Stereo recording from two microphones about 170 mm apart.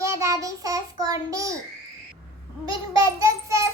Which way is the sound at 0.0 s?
15° right (ahead or behind).